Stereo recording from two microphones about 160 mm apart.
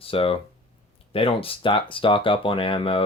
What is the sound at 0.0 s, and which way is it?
Speech, 35° left (ahead or behind).